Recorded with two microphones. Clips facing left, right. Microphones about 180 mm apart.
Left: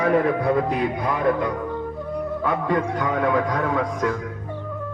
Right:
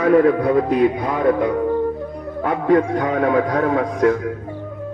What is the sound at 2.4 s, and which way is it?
Speech, 55° right (ahead or behind).